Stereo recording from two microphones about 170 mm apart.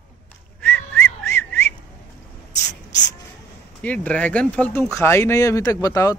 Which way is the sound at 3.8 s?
10° left (ahead or behind).